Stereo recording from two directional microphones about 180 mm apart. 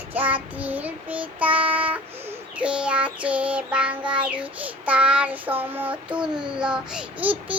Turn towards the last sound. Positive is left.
turn(degrees=-10)  # may be behind; listen again after turning